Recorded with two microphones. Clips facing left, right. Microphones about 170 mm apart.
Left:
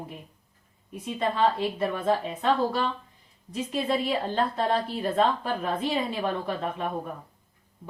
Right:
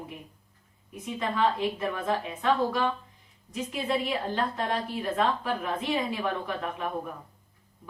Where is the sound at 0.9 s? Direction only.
30° left (ahead or behind).